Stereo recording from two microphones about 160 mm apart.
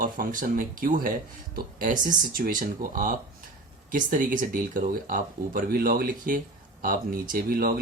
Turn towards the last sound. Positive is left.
turn(degrees=-65)  # may be behind; listen again after turning